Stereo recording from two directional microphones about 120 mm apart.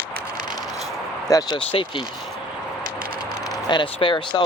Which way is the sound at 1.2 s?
30° left (ahead or behind).